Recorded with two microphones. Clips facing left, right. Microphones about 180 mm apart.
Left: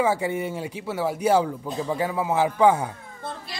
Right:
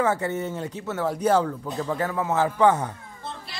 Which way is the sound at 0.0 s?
10° left (ahead or behind).